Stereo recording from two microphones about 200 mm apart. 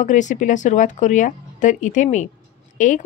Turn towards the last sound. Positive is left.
turn(degrees=40)  # may be behind; listen again after turning